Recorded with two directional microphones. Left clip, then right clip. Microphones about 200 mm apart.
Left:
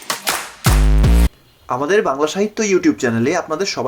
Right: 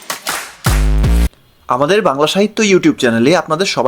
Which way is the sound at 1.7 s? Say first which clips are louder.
Right 4 dB; 45° right (ahead or behind).